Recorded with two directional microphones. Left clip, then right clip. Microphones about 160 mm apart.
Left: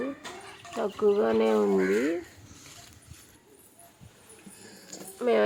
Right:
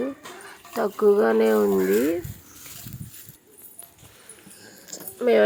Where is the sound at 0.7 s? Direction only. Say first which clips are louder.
Right 6 dB; 25° right (ahead or behind).